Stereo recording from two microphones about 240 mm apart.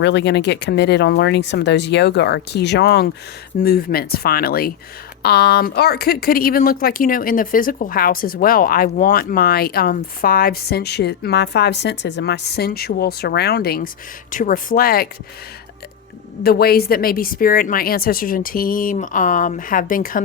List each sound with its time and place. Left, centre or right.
0.0 s speech: left
16.4 s speech: left